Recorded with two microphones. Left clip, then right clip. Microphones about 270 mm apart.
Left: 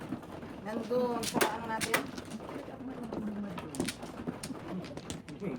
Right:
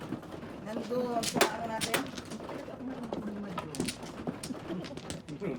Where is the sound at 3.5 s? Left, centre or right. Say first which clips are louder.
Right 2 dB; centre.